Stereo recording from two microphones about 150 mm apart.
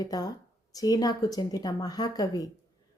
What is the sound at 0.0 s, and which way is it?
A woman's voice, 25° left (ahead or behind).